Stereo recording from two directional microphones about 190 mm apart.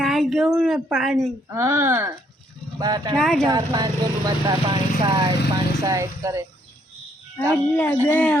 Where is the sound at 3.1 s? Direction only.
Centre (ahead or behind).